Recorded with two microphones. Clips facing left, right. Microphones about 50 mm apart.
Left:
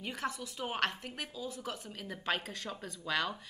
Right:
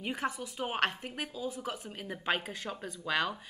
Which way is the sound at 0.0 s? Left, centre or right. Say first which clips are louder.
Right 3 dB; centre.